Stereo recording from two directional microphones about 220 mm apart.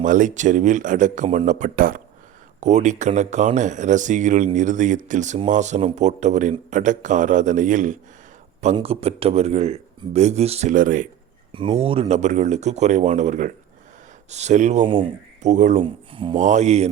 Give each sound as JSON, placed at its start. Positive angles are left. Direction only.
{"t": 0.0, "sound": "speech", "side_deg": -35}
{"t": 11.5, "sound": "speech", "side_deg": -25}
{"t": 14.8, "sound": "speech", "side_deg": -20}